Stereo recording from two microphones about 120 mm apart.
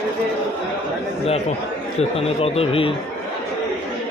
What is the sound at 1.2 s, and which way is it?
A man's voice, 60° left (ahead or behind).